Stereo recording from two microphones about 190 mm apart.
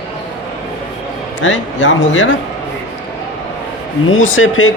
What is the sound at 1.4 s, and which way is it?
Speech, 80° left.